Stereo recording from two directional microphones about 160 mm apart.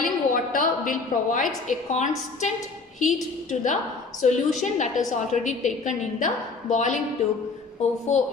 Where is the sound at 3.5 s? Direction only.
50° left (ahead or behind).